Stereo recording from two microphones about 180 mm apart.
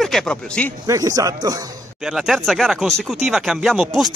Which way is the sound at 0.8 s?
20° right (ahead or behind).